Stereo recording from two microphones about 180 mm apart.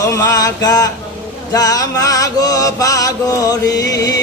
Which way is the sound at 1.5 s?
20° left (ahead or behind).